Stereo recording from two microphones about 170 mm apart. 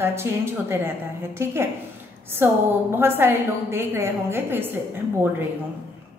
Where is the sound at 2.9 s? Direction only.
15° right (ahead or behind).